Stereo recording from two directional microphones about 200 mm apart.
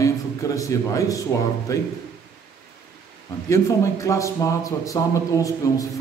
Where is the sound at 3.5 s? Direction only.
15° left (ahead or behind).